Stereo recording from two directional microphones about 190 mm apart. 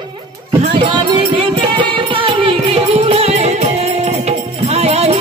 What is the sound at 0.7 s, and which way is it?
Music, 25° right (ahead or behind).